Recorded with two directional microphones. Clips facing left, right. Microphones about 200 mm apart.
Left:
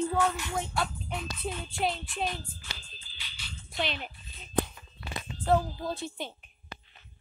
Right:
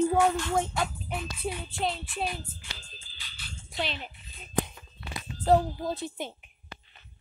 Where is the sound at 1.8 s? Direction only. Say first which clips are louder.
Even; centre (ahead or behind).